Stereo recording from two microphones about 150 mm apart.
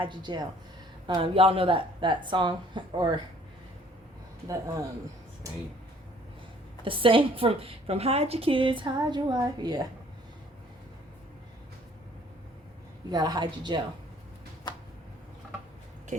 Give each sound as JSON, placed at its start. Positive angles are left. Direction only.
{"t": 0.0, "sound": "a woman's voice", "side_deg": -30}
{"t": 4.4, "sound": "a woman's voice", "side_deg": -20}
{"t": 6.8, "sound": "a woman's voice", "side_deg": -35}
{"t": 13.1, "sound": "a woman's voice", "side_deg": -25}
{"t": 14.7, "sound": "a sound", "side_deg": 30}